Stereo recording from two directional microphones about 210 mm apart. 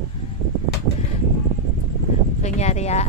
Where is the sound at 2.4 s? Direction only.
30° left (ahead or behind).